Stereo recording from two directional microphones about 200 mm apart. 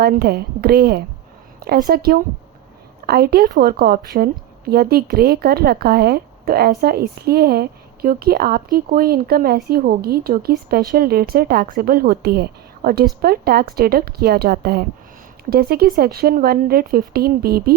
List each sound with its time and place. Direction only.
0.0 s a woman's voice: 50° right (ahead or behind)
1.5 s a sound: 50° right (ahead or behind)
1.9 s a woman's voice: 50° right (ahead or behind)